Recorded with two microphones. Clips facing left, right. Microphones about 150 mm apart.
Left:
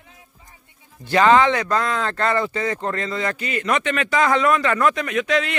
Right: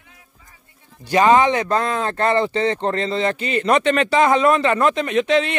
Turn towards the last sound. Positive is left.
turn(degrees=-25)  # may be behind; listen again after turning